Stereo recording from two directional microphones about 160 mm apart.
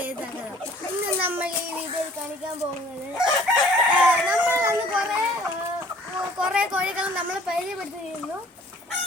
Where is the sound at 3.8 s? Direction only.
15° right (ahead or behind).